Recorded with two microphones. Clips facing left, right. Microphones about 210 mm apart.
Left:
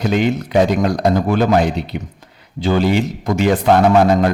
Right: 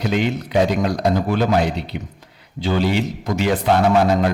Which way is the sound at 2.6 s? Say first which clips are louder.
Left 4 dB; 50° left (ahead or behind).